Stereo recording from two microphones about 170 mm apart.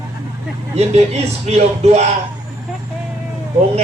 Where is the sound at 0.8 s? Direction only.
40° right (ahead or behind).